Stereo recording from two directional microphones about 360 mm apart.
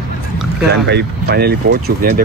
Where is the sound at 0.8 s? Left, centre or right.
Right.